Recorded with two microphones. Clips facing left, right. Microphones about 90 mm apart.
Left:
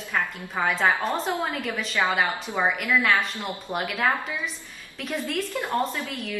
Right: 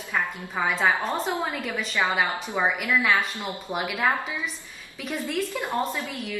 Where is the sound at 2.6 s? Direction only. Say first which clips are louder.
Left 1 dB; centre (ahead or behind).